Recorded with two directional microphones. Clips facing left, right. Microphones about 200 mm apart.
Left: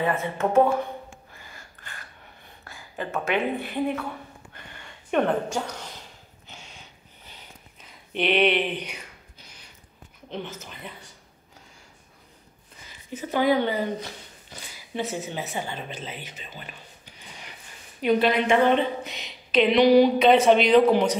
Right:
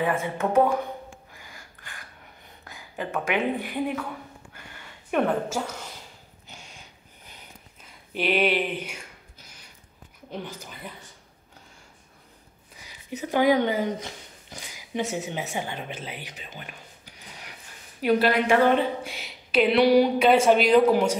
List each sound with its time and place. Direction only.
0.0 s a woman's voice: 10° right (ahead or behind)
1.3 s a sound: 15° right (ahead or behind)
2.6 s a woman's voice: 15° right (ahead or behind)
4.6 s a sound: 5° right (ahead or behind)
7.8 s speech: 5° right (ahead or behind)
10.3 s a woman's voice: 10° right (ahead or behind)
13.3 s a woman's voice: 15° right (ahead or behind)
16.5 s a sound: 10° right (ahead or behind)
18.0 s a woman's voice: 5° right (ahead or behind)